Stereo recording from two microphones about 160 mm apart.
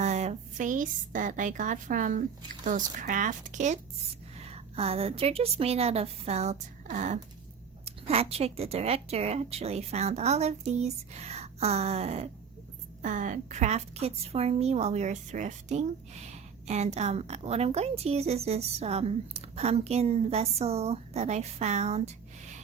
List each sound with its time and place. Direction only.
0.0 s a woman's voice: 45° right (ahead or behind)
13.0 s a woman's voice: 50° right (ahead or behind)